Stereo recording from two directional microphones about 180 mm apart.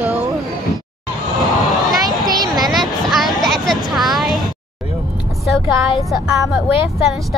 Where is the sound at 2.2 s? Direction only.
20° right (ahead or behind).